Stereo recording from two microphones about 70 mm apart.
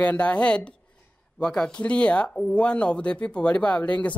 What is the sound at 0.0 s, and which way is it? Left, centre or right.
Speech, centre.